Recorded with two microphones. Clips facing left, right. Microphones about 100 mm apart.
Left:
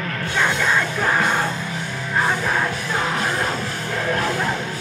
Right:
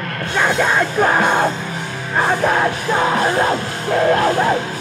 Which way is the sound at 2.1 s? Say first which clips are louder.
Right 5 dB; 65° right (ahead or behind).